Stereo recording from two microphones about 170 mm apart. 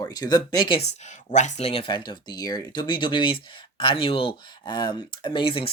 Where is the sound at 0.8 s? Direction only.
45° left (ahead or behind).